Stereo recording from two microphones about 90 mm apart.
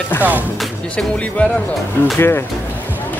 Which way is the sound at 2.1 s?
25° left (ahead or behind).